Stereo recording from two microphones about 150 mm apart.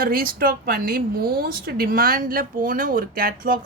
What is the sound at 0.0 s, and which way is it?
A woman's voice, 70° right (ahead or behind).